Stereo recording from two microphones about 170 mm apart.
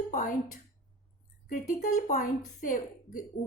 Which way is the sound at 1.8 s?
55° left (ahead or behind).